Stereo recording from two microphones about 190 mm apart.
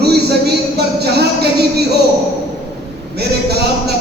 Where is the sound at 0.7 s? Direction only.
60° right (ahead or behind).